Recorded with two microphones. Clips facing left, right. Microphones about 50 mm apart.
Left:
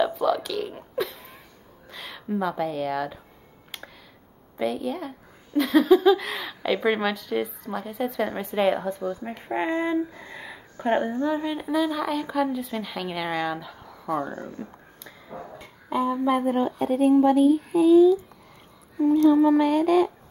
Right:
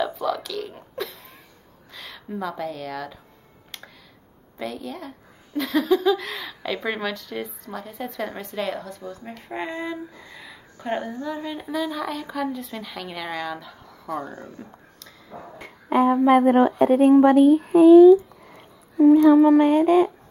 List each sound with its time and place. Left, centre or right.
0.0 s a sound: centre
1.9 s speech: centre
4.6 s speech: centre
8.5 s speech: left
15.6 s a sound: right
16.3 s speech: right
19.6 s speech: right